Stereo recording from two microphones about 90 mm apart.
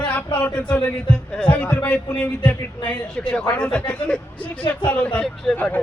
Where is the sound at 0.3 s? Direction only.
20° left (ahead or behind).